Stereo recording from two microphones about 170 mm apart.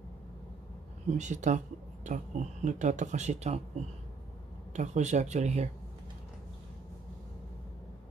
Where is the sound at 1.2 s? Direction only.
45° right (ahead or behind).